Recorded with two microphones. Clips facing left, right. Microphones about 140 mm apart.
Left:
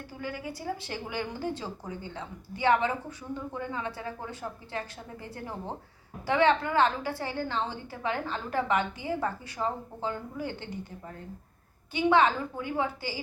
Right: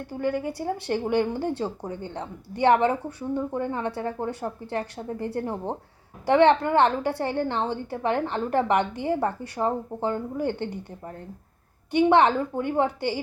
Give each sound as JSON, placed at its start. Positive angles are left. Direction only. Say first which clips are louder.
{"t": 0.1, "sound": "a woman's voice", "louder": "right 11 dB", "side_deg": -55}
{"t": 12.2, "sound": "a woman's voice", "louder": "right 5 dB", "side_deg": -55}